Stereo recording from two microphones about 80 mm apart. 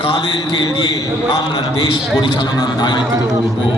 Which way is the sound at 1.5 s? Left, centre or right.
Left.